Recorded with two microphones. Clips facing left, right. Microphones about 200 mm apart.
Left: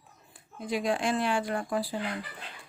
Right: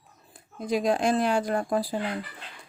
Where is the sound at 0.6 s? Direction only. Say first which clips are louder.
Right 5 dB; 40° right (ahead or behind).